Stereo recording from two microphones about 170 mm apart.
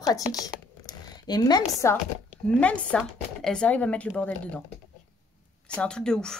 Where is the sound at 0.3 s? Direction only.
20° left (ahead or behind).